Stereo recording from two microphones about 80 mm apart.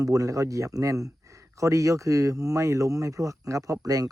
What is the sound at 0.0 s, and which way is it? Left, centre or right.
A man's voice, right.